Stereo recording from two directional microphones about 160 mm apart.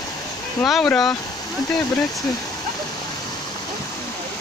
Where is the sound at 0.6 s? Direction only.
Centre (ahead or behind).